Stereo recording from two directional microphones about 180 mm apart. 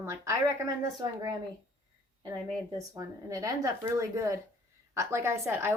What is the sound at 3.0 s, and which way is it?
Speech, 20° right (ahead or behind).